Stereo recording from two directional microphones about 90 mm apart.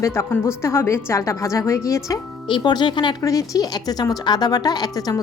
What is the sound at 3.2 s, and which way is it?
A woman's voice, 40° left (ahead or behind).